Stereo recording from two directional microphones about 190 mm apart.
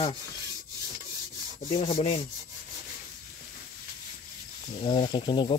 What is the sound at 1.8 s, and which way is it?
Rub, 30° left (ahead or behind).